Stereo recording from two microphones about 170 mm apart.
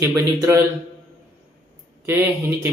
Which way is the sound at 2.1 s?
10° right (ahead or behind).